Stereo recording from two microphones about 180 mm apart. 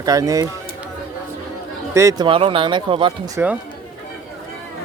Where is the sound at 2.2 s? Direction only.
30° right (ahead or behind).